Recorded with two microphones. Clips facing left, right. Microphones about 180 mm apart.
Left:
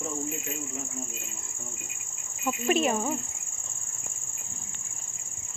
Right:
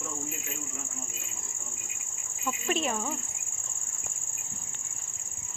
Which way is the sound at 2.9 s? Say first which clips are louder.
Left 5 dB; 25° left (ahead or behind).